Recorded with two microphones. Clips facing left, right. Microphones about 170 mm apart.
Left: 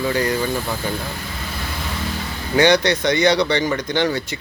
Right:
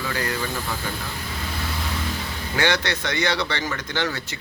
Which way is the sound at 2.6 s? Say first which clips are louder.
Left 8 dB; 15° left (ahead or behind).